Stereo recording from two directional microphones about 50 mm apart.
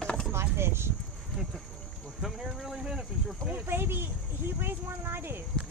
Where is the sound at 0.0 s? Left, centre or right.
Centre.